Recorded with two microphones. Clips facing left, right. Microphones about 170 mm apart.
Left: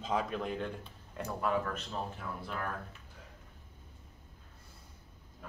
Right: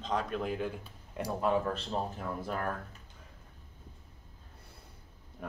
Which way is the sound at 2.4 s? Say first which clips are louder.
Right 4 dB; 45° right (ahead or behind).